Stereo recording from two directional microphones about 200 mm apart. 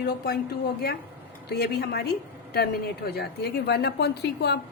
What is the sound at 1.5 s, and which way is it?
A woman's voice, 50° left (ahead or behind).